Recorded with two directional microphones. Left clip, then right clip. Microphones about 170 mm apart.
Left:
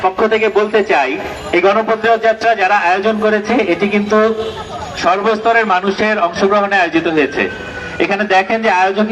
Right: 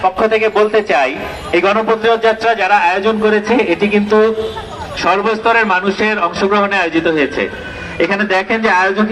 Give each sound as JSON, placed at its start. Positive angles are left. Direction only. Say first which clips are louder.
{"t": 0.0, "sound": "a man's voice", "louder": "even", "side_deg": -85}